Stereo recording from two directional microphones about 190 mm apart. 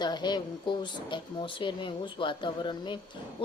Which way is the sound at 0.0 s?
20° left (ahead or behind).